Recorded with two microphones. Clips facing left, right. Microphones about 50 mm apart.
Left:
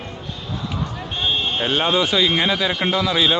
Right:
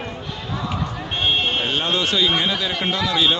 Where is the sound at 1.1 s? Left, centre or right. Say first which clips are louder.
Right 2 dB; right.